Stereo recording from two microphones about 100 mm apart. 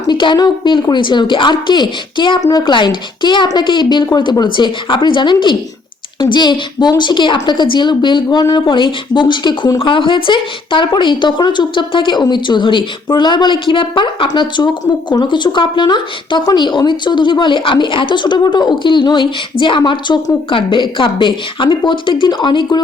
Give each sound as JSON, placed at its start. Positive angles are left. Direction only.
{"t": 0.0, "sound": "a woman's voice", "side_deg": 50}